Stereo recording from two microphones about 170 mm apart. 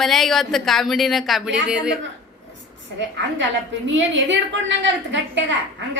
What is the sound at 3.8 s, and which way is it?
Speech, 90° right.